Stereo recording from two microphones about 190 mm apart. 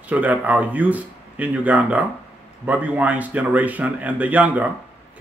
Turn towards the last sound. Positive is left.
turn(degrees=-10)  # may be behind; listen again after turning